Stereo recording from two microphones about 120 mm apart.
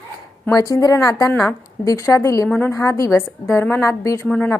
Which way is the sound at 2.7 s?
25° left (ahead or behind).